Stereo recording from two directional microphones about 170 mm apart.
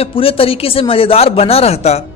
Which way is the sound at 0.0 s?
35° left (ahead or behind).